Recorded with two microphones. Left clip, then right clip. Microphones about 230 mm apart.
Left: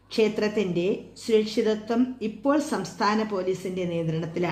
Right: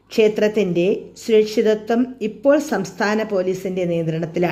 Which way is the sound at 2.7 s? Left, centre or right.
Right.